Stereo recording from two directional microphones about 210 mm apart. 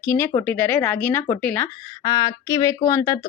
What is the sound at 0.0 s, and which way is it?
Speech, 15° left (ahead or behind).